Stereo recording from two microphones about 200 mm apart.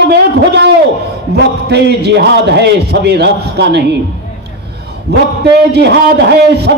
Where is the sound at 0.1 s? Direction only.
60° right (ahead or behind).